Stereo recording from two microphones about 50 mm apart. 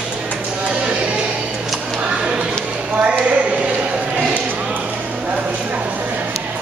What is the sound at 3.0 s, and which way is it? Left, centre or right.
Clip-clop, right.